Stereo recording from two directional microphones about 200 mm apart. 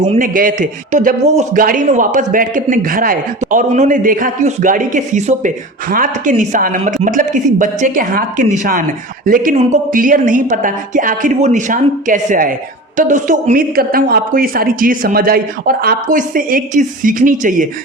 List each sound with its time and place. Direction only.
0.0 s speech: 40° right (ahead or behind)